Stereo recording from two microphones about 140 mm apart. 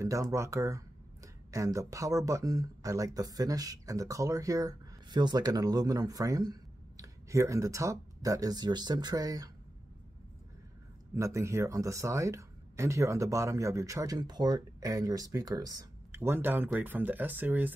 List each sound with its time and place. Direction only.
0.0 s speech: 25° right (ahead or behind)
11.1 s speech: 20° right (ahead or behind)